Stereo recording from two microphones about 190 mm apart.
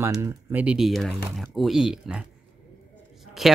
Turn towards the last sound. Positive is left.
turn(degrees=0)  # may be behind; listen again after turning